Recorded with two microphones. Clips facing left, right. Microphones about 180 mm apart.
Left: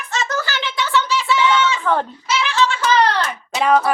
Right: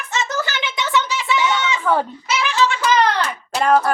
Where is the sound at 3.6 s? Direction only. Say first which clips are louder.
Even; centre (ahead or behind).